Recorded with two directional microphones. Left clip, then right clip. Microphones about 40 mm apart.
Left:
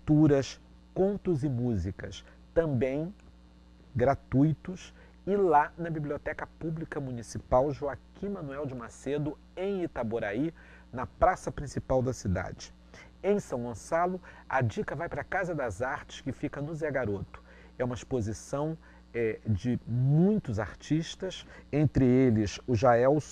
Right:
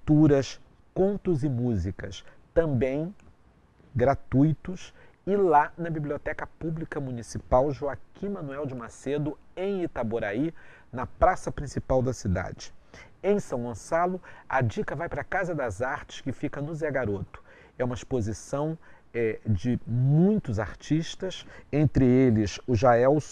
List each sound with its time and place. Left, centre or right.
0.0 s speech: right